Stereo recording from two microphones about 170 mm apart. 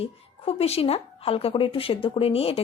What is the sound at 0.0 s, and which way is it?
Speech, 35° left (ahead or behind).